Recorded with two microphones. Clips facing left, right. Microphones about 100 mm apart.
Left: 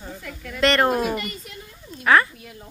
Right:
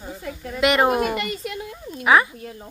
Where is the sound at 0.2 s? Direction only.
25° right (ahead or behind).